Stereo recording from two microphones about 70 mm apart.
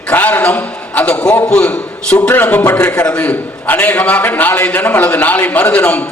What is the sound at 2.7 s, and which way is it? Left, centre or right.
A man's voice, centre.